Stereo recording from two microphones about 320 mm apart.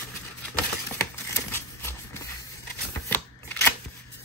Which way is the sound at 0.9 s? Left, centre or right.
Centre.